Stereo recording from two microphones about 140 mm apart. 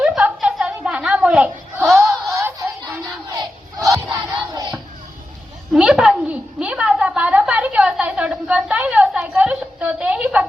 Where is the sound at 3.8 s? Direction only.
25° right (ahead or behind).